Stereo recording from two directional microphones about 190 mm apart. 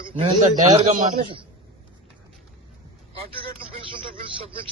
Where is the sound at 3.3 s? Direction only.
25° right (ahead or behind).